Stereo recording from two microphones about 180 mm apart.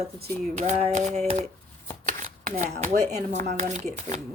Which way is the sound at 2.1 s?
45° right (ahead or behind).